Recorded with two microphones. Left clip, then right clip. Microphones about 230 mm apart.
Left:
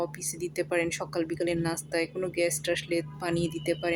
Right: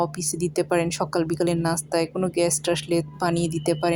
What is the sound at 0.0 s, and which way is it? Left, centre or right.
A woman's voice, centre.